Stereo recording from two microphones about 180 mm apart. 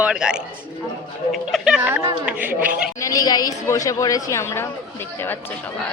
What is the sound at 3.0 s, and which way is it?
Speech, 20° left (ahead or behind).